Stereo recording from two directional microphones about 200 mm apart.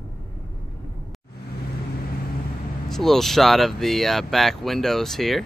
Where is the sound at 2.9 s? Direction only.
Centre (ahead or behind).